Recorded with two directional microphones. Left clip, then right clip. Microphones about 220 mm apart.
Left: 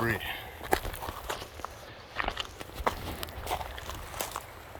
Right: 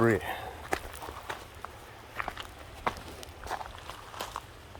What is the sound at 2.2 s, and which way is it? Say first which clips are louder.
Walk: left 4 dB; 40° left (ahead or behind).